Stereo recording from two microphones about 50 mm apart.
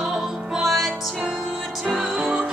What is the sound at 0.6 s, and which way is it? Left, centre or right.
Music, centre.